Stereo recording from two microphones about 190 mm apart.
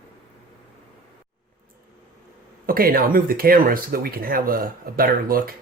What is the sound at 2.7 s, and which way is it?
Speech, 50° right (ahead or behind).